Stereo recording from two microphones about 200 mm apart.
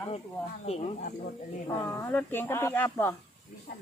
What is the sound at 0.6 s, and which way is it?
Speech, 30° left (ahead or behind).